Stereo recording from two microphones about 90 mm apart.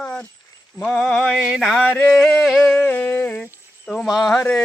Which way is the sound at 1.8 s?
10° left (ahead or behind).